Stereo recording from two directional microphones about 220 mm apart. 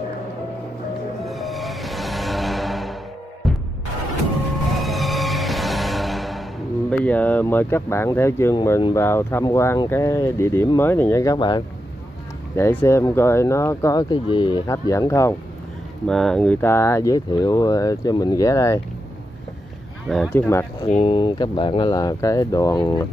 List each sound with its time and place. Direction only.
1.2 s music: centre (ahead or behind)
4.7 s music: centre (ahead or behind)
6.9 s speech: 5° left (ahead or behind)
16.1 s speech: 5° left (ahead or behind)
20.1 s speech: 5° left (ahead or behind)
20.8 s speech: 25° left (ahead or behind)